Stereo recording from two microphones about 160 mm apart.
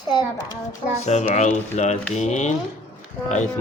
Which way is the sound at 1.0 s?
45° left (ahead or behind).